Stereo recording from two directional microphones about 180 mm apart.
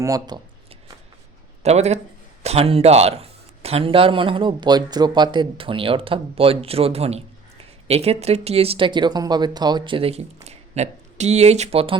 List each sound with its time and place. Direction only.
0.0 s speech: 20° right (ahead or behind)
1.6 s a man's voice: 35° right (ahead or behind)